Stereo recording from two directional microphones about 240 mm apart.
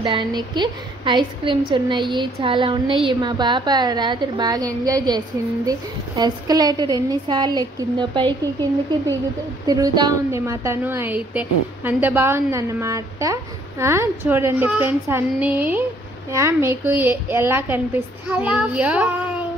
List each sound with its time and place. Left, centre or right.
0.0 s a woman's voice: centre
9.7 s a woman's voice: centre